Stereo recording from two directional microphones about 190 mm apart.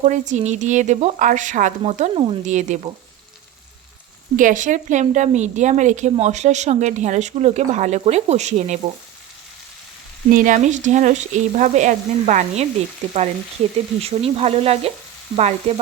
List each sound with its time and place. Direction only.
0.0 s speech: 40° right (ahead or behind)
4.4 s speech: 45° right (ahead or behind)
10.3 s speech: 45° right (ahead or behind)
14.0 s speech: 30° right (ahead or behind)